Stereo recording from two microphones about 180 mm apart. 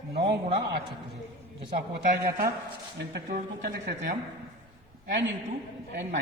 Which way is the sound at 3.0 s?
70° right (ahead or behind).